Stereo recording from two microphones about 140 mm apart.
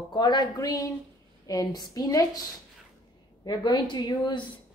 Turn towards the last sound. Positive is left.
turn(degrees=30)  # may be behind; listen again after turning